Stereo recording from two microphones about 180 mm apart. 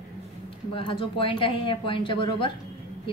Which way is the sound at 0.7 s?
30° left (ahead or behind).